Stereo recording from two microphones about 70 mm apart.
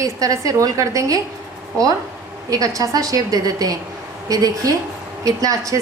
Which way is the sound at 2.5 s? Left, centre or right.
Right.